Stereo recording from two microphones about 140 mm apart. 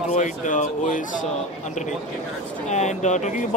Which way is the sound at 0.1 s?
60° left (ahead or behind).